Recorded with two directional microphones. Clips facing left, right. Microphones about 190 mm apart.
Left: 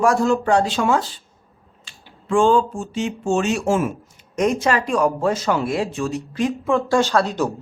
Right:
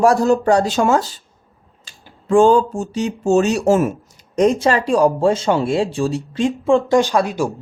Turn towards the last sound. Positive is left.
turn(degrees=-10)  # may be behind; listen again after turning